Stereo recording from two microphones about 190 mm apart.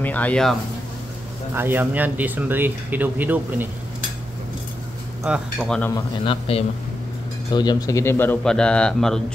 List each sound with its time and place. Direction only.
0.0 s a man's voice: 10° left (ahead or behind)
1.5 s speech: 10° right (ahead or behind)
5.2 s speech: 5° right (ahead or behind)
5.8 s a man's voice: 15° left (ahead or behind)
6.2 s a man's voice: 30° left (ahead or behind); by 9.2 s 5° left (ahead or behind)